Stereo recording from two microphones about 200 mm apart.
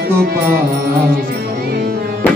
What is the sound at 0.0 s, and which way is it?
Music, 50° right (ahead or behind).